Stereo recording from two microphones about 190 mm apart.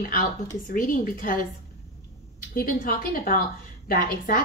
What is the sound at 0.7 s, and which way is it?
Speech, 45° left (ahead or behind).